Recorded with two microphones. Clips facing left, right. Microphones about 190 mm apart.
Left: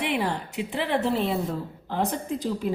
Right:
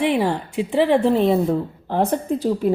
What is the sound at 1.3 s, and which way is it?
A woman's voice, 50° right (ahead or behind).